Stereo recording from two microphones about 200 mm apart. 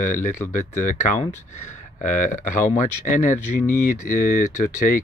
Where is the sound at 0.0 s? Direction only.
40° left (ahead or behind).